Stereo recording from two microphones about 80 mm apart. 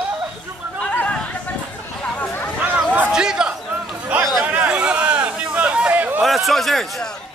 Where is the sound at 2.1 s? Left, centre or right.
Centre.